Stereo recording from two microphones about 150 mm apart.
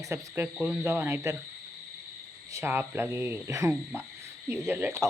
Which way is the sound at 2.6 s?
15° right (ahead or behind).